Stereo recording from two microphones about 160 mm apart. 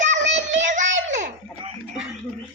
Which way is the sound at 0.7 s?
50° right (ahead or behind).